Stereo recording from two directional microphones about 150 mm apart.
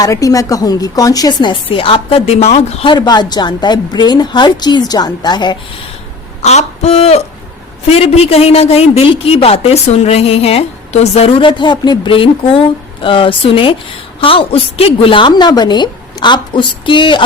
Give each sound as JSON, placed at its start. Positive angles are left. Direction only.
{"t": 0.0, "sound": "a woman's voice", "side_deg": 20}
{"t": 2.8, "sound": "a woman's voice", "side_deg": 30}
{"t": 6.4, "sound": "a sound", "side_deg": 45}
{"t": 7.9, "sound": "a woman's voice", "side_deg": 40}